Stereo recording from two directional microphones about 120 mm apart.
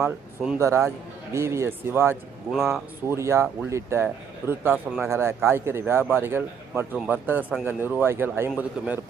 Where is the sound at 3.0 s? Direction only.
25° right (ahead or behind).